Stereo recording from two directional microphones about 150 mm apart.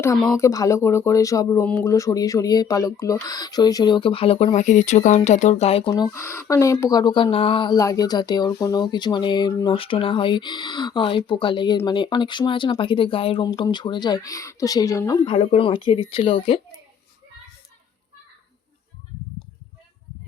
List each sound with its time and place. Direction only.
0.3 s speech: 20° left (ahead or behind); by 5.9 s 40° left (ahead or behind)
5.9 s speech: 20° left (ahead or behind)
9.7 s speech: 35° left (ahead or behind); by 15.3 s 20° left (ahead or behind)
15.3 s speech: 40° left (ahead or behind)